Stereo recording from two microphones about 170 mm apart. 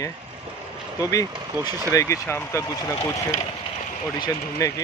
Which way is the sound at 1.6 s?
15° right (ahead or behind).